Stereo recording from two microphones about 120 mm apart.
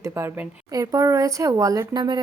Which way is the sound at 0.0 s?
20° right (ahead or behind).